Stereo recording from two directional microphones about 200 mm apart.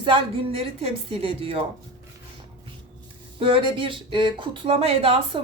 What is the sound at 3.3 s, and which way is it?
Speech, 25° right (ahead or behind).